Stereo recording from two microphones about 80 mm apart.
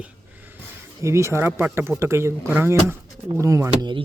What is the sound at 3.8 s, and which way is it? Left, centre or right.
Speech, right.